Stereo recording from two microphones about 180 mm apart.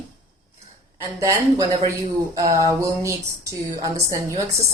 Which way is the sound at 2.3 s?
20° right (ahead or behind).